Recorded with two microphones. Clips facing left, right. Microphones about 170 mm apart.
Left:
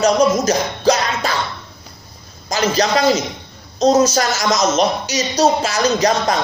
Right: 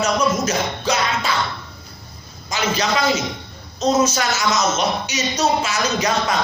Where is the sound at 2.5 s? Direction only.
40° left (ahead or behind).